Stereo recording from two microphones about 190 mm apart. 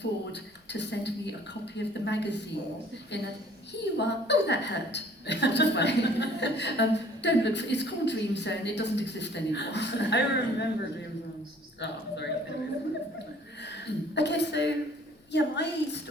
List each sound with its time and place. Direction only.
0.0 s a woman's voice: 65° left (ahead or behind)
11.8 s a woman's voice: 65° left (ahead or behind)
13.6 s a woman's voice: 65° left (ahead or behind)